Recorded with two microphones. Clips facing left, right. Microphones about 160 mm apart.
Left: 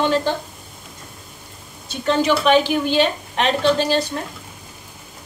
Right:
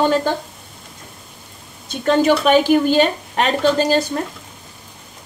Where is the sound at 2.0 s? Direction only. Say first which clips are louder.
Right 3 dB; 45° right (ahead or behind).